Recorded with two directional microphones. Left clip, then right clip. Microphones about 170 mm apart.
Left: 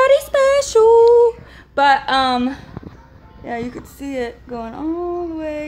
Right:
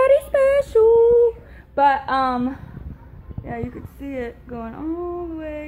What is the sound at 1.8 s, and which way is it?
Speech, 20° left (ahead or behind).